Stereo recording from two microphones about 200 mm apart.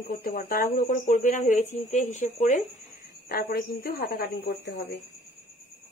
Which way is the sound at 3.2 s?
50° left (ahead or behind).